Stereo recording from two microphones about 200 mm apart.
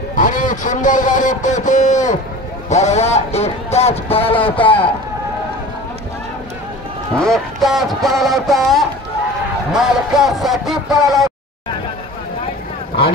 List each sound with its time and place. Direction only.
0.1 s speech: 40° left (ahead or behind)
7.2 s speech: centre (ahead or behind)